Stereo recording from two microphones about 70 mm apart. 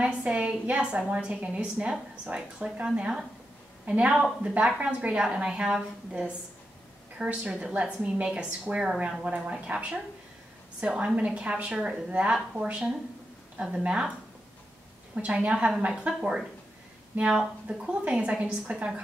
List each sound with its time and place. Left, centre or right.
0.0 s a woman's voice: centre
15.1 s a woman's voice: centre